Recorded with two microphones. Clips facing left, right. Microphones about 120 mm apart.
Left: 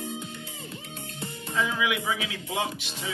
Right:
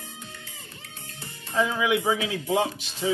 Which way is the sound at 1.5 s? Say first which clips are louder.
Right 4 dB; 30° right (ahead or behind).